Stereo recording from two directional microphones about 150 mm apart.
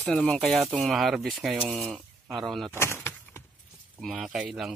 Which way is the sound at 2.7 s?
15° left (ahead or behind).